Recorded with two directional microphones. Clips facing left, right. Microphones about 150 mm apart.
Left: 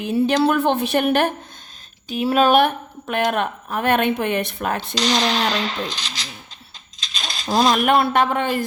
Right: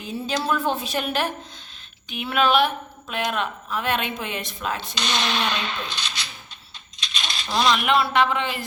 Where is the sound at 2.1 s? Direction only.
35° left (ahead or behind); by 5.0 s 55° left (ahead or behind).